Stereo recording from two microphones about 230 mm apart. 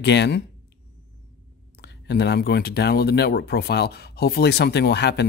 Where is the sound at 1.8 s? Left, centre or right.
Left.